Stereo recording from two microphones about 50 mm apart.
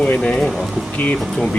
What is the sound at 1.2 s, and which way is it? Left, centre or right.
Speech, centre.